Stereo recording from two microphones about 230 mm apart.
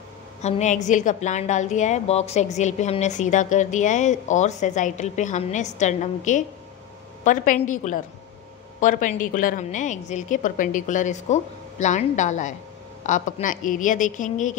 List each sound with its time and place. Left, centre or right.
0.4 s a woman's voice: left